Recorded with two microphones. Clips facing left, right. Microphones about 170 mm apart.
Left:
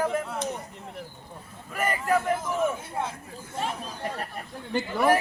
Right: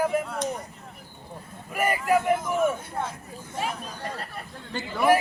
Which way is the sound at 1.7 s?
10° right (ahead or behind).